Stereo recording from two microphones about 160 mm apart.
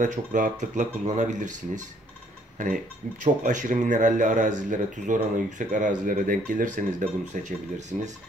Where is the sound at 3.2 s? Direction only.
50° right (ahead or behind).